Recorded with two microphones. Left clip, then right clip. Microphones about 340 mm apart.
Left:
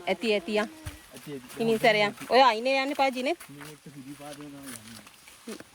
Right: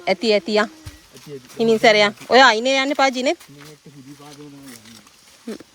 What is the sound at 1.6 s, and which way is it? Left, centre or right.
Speech, right.